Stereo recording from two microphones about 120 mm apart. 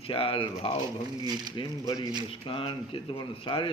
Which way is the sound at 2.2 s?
50° left (ahead or behind).